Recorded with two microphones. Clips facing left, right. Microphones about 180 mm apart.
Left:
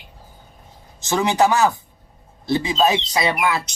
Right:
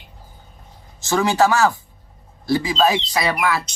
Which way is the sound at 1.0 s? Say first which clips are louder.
Right 1 dB; 20° left (ahead or behind).